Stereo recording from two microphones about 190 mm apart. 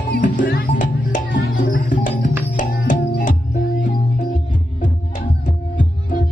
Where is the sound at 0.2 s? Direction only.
45° left (ahead or behind).